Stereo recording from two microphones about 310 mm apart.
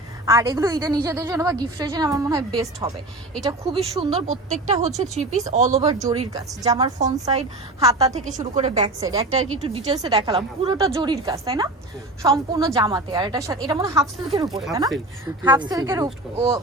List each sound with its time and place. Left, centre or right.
0.3 s a woman's voice: centre
5.8 s a woman's voice: centre